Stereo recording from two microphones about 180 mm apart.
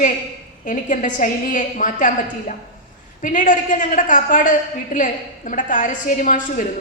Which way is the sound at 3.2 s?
45° left (ahead or behind).